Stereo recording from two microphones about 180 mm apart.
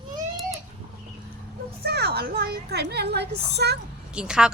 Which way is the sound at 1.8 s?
65° right (ahead or behind).